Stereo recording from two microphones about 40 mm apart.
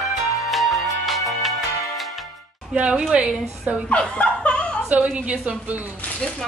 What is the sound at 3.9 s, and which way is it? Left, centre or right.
Snicker, left.